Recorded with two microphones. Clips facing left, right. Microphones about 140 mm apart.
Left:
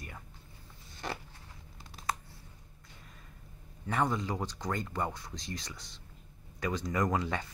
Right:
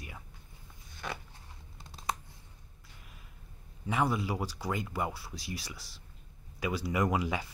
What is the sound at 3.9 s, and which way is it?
Speech, 10° right (ahead or behind).